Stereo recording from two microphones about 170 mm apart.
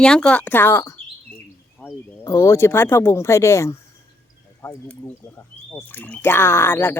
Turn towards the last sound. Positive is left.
turn(degrees=10)  # may be behind; listen again after turning